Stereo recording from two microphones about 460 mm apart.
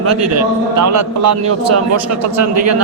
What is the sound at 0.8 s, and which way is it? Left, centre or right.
A man's voice, right.